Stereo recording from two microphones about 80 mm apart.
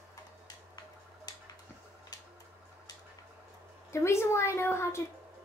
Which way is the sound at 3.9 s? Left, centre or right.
Left.